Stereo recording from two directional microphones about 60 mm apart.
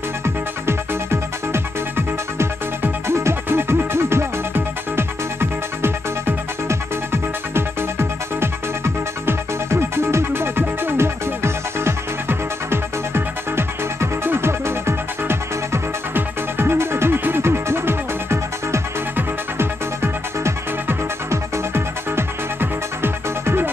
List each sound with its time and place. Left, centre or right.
1.5 s music: right